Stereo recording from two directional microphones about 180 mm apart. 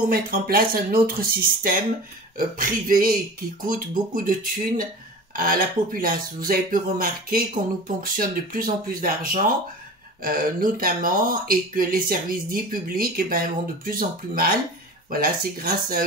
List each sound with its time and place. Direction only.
0.1 s speech: 55° right (ahead or behind)